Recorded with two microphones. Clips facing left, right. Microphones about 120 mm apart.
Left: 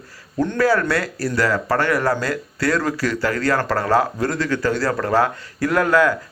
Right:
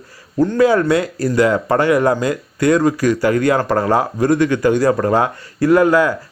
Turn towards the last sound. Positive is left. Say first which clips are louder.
# right 5 dB
turn(degrees=-10)  # may be behind; listen again after turning